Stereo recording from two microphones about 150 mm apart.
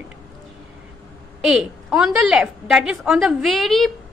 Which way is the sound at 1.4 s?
5° right (ahead or behind).